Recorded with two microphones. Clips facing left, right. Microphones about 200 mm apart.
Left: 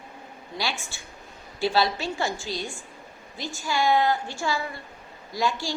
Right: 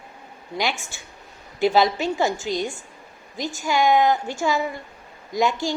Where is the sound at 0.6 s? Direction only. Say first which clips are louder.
Right 5 dB; 20° right (ahead or behind).